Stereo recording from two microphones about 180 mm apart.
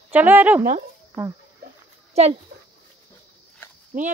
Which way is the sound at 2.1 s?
35° right (ahead or behind).